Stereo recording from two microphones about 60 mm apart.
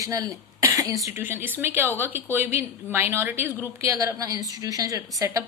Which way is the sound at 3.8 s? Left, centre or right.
Right.